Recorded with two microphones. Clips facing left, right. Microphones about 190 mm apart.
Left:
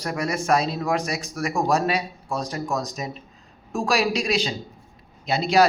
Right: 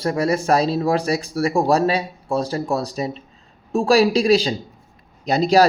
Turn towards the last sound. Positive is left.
turn(degrees=-40)  # may be behind; listen again after turning